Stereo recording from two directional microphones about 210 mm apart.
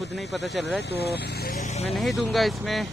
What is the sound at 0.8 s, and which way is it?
Speech, 50° left (ahead or behind).